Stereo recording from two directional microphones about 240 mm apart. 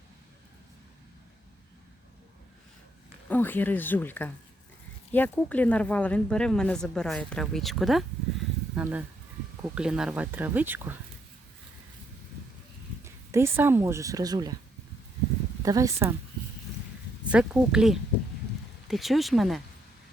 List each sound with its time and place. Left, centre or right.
3.2 s speech: centre
13.3 s speech: centre
15.6 s speech: centre
17.2 s speech: centre